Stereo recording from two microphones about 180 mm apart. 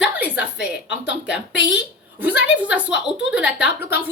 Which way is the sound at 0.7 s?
70° left (ahead or behind).